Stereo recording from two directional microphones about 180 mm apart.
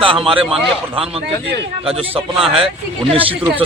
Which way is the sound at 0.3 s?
Centre (ahead or behind).